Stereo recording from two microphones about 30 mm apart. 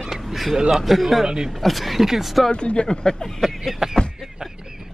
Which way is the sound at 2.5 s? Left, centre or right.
Left.